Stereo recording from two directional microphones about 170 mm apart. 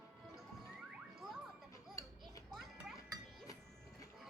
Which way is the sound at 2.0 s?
15° left (ahead or behind).